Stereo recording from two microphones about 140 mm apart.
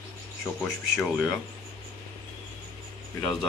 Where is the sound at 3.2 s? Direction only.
5° left (ahead or behind).